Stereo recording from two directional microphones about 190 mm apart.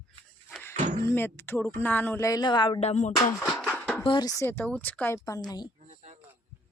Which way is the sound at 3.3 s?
5° left (ahead or behind).